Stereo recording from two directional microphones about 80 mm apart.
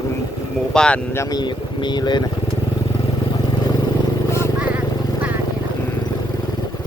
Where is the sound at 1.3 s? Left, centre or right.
Left.